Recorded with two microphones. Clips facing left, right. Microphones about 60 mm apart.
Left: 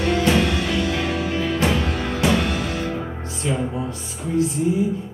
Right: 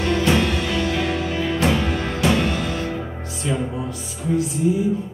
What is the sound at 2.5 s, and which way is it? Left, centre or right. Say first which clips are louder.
Music: even; centre.